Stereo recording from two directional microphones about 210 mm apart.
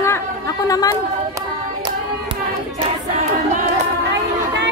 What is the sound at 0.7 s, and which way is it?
Speech, 20° left (ahead or behind).